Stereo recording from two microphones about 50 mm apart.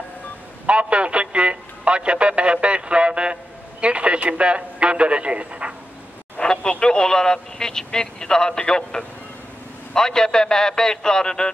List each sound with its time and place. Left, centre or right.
0.7 s a man's voice: right
6.4 s speech: centre